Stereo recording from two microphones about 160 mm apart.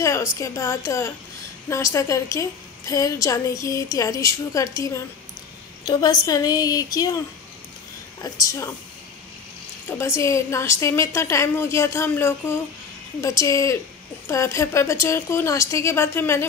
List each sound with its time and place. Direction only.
0.0 s a woman's voice: 20° left (ahead or behind)
8.2 s a woman's voice: 20° left (ahead or behind)
9.8 s a woman's voice: 15° left (ahead or behind)